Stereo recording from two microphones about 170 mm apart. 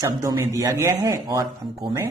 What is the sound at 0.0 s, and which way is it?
Speech, 20° right (ahead or behind).